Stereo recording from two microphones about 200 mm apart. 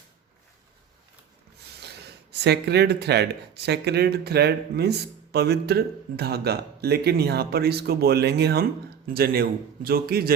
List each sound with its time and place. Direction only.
2.3 s speech: 55° right (ahead or behind)